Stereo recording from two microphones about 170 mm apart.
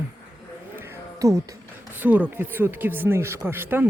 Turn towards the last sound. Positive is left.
turn(degrees=-10)  # may be behind; listen again after turning